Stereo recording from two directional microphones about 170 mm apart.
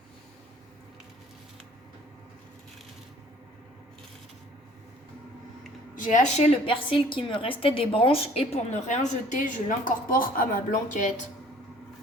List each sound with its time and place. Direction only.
6.0 s a woman's voice: 45° left (ahead or behind)